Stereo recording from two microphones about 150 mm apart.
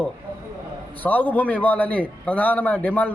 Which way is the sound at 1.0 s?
10° left (ahead or behind).